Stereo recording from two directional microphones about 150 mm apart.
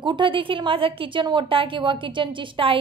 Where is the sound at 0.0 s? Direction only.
30° right (ahead or behind).